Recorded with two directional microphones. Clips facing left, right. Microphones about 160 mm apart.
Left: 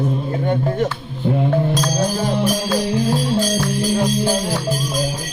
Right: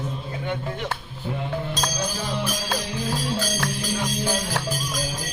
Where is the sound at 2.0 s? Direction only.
45° left (ahead or behind).